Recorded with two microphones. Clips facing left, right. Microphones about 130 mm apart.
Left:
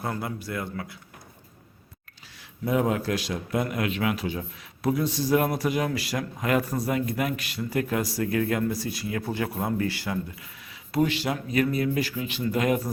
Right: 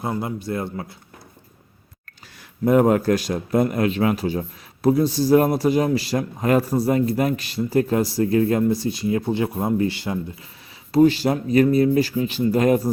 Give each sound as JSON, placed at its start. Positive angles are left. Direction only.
{"t": 0.0, "sound": "a man's voice", "side_deg": -20}
{"t": 2.6, "sound": "a man's voice", "side_deg": -50}
{"t": 10.9, "sound": "a man's voice", "side_deg": -35}